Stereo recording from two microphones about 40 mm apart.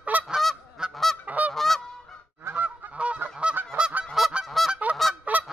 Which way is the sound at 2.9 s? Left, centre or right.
Right.